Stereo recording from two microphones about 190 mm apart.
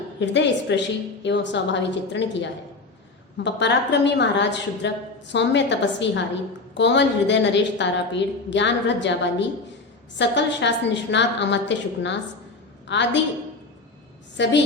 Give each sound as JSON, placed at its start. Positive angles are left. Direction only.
{"t": 0.2, "sound": "a woman's voice", "side_deg": 70}
{"t": 10.2, "sound": "a woman's voice", "side_deg": 70}
{"t": 14.4, "sound": "a woman's voice", "side_deg": 70}